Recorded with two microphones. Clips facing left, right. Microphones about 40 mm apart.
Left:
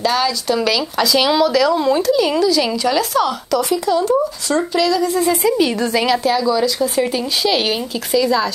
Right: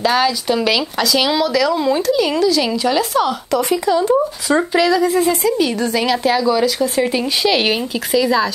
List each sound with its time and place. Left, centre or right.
0.0 s speech: centre
5.3 s speech: centre
6.3 s speech: centre